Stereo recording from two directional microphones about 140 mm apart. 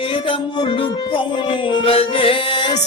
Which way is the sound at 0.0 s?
40° left (ahead or behind).